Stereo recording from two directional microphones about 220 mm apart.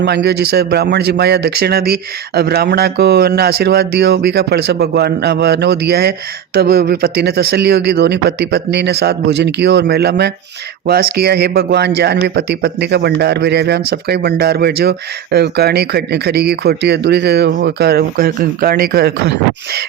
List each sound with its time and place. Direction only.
0.0 s a man's voice: 50° right (ahead or behind)